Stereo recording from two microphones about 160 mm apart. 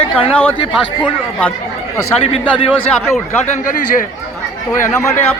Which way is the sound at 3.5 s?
55° left (ahead or behind).